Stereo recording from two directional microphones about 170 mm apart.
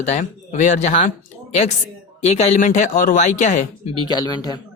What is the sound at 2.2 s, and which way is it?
Speech, 40° left (ahead or behind).